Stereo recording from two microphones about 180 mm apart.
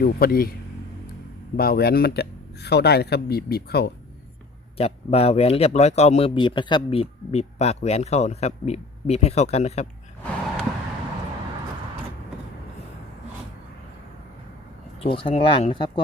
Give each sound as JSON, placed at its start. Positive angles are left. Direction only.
{"t": 0.0, "sound": "speech", "side_deg": 55}
{"t": 1.5, "sound": "speech", "side_deg": 60}
{"t": 4.8, "sound": "speech", "side_deg": 35}
{"t": 15.0, "sound": "speech", "side_deg": 30}